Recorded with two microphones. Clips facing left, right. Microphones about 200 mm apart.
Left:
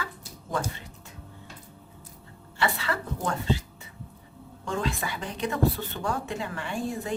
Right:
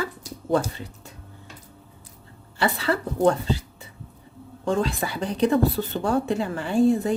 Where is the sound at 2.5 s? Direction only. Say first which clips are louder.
Right 5 dB; 35° right (ahead or behind).